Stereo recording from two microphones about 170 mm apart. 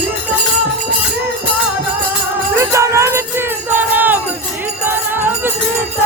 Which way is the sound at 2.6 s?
15° right (ahead or behind).